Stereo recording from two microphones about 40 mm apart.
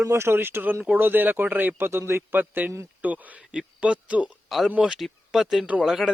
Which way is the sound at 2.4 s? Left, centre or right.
Right.